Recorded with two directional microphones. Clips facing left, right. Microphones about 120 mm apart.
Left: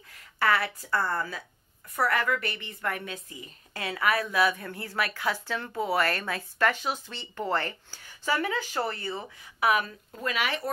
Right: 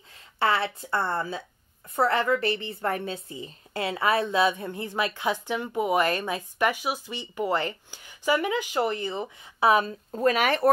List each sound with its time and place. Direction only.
0.1 s a woman's voice: 25° right (ahead or behind); by 10.7 s 50° right (ahead or behind)